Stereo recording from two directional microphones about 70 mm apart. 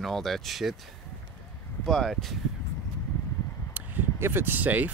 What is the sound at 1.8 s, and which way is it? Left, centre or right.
Speech, centre.